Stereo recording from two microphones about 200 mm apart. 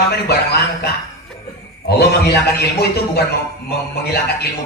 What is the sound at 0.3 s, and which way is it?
Speech, 55° left (ahead or behind).